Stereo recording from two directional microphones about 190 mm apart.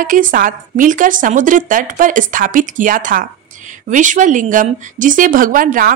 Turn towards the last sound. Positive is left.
turn(degrees=-45)  # may be behind; listen again after turning